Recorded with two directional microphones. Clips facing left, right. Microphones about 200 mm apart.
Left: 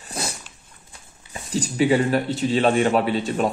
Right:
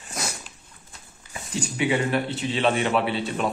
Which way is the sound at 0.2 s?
30° left (ahead or behind).